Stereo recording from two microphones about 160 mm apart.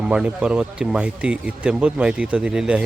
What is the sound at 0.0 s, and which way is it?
Speech, 5° right (ahead or behind).